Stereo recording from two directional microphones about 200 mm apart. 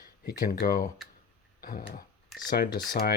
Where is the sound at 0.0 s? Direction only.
45° left (ahead or behind).